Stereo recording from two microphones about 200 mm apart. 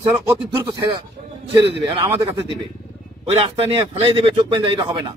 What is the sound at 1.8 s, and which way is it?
Speech, 20° right (ahead or behind).